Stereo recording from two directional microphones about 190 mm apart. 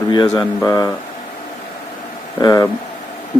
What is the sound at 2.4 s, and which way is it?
Speech, 20° left (ahead or behind).